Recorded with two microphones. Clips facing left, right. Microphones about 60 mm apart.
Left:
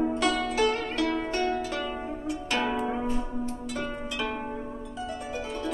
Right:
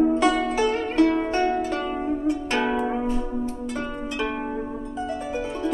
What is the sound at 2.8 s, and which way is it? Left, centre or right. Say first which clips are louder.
Zither: right 4 dB; centre.